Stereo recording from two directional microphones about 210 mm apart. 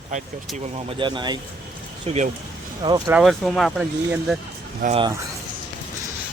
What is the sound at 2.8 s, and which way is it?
Speech, 15° right (ahead or behind).